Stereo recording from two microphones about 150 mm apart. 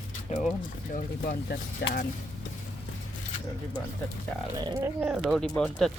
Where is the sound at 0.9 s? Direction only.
70° left (ahead or behind).